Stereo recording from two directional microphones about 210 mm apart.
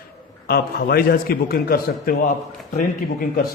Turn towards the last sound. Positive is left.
turn(degrees=40)  # may be behind; listen again after turning